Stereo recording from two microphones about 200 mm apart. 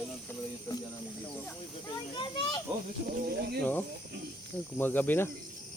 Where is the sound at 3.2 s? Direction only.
55° right (ahead or behind).